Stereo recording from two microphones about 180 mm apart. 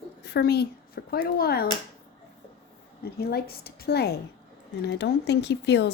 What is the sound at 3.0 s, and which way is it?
Speech, 60° left (ahead or behind).